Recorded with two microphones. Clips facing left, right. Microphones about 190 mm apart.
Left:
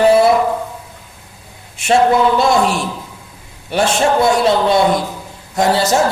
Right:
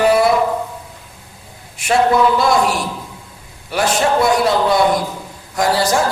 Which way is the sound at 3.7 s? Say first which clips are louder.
Left 2 dB; 25° left (ahead or behind).